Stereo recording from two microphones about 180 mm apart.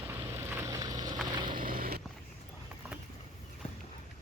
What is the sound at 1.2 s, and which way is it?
Vehicle, 25° right (ahead or behind).